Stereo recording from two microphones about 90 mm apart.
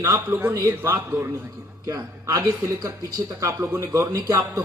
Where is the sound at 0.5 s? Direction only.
30° right (ahead or behind).